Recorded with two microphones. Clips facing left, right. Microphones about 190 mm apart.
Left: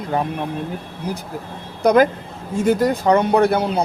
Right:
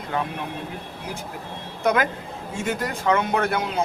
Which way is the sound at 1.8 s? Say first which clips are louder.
Left 8 dB; 35° left (ahead or behind).